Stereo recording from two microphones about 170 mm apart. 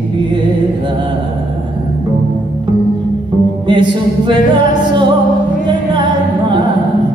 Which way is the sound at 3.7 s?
30° right (ahead or behind).